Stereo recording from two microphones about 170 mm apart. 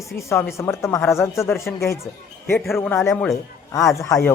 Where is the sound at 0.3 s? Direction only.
15° left (ahead or behind).